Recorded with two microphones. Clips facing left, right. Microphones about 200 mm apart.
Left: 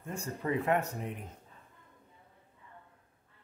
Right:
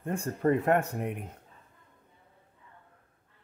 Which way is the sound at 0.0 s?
55° right (ahead or behind).